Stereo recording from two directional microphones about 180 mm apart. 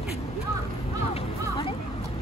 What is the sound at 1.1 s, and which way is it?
Music, 30° left (ahead or behind).